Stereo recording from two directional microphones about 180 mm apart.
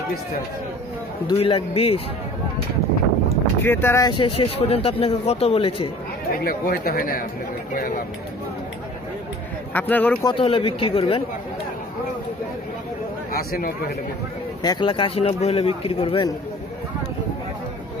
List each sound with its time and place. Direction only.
1.2 s speech: 30° left (ahead or behind)
3.6 s speech: 10° left (ahead or behind); by 5.9 s 30° left (ahead or behind)
6.4 s speech: 55° left (ahead or behind)
9.8 s speech: 10° left (ahead or behind)
10.2 s speech: 30° left (ahead or behind)
13.3 s a man's voice: 55° left (ahead or behind)
14.6 s speech: 25° left (ahead or behind)